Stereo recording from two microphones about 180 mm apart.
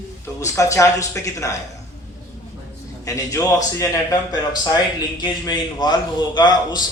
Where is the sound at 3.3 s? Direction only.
20° left (ahead or behind).